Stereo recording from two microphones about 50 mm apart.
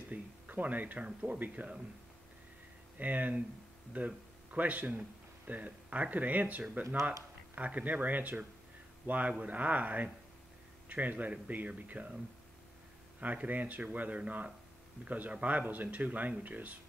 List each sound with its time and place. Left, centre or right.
0.1 s a sound: right
1.0 s speech: right
3.0 s a man's voice: right
13.2 s speech: right